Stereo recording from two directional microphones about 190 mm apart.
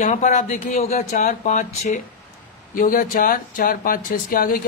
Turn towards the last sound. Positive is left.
turn(degrees=50)  # may be behind; listen again after turning